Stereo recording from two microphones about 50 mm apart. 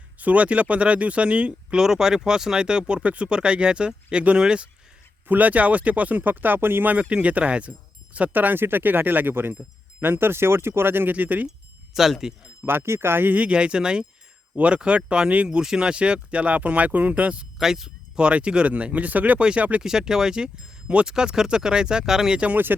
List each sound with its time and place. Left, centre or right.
0.2 s speech: right
1.8 s speech: centre
5.3 s speech: right
6.9 s speech: right
8.3 s speech: right
11.1 s speech: right
11.9 s speech: centre
12.6 s speech: right
13.4 s speech: right
17.6 s speech: centre
18.2 s speech: right
19.4 s speech: centre